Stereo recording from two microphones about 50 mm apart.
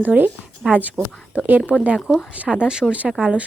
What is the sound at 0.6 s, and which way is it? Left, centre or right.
Speech, right.